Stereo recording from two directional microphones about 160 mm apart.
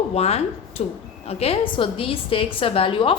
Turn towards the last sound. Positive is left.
turn(degrees=35)  # may be behind; listen again after turning